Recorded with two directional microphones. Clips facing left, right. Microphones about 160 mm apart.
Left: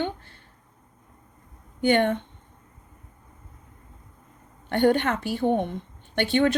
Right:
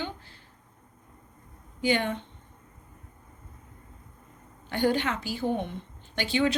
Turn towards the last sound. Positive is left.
turn(degrees=55)  # may be behind; listen again after turning